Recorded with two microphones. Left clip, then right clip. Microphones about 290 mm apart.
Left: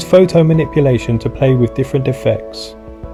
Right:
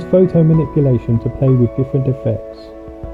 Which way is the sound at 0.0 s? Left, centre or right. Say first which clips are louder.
Left 4 dB; left.